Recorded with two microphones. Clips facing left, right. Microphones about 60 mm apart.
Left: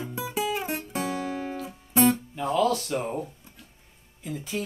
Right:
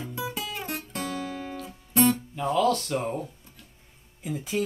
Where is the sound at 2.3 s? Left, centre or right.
Centre.